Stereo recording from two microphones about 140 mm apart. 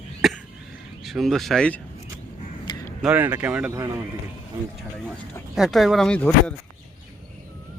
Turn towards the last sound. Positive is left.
turn(degrees=10)  # may be behind; listen again after turning